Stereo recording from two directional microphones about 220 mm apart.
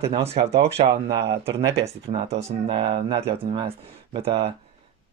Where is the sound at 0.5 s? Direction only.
50° right (ahead or behind).